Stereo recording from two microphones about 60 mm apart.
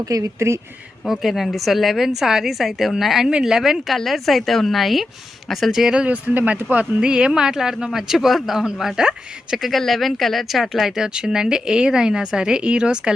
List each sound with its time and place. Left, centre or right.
0.0 s speech: right
0.3 s speech: right
1.0 s a woman's voice: centre
6.2 s speech: right
7.0 s speech: centre